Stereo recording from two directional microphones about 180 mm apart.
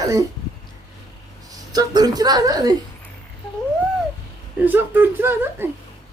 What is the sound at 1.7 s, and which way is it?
Speech, 20° right (ahead or behind).